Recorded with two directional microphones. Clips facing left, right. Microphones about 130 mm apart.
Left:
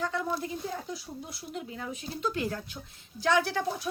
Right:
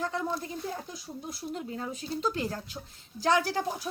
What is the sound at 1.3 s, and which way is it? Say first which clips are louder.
A woman's voice: right 6 dB; 35° right (ahead or behind).